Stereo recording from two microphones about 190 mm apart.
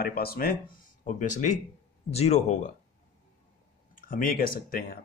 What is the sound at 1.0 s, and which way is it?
Speech, 40° left (ahead or behind).